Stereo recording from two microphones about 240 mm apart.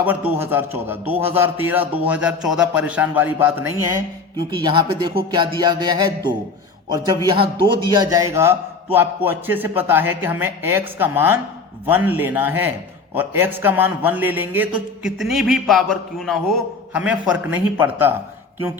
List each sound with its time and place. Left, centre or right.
0.0 s a man's voice: centre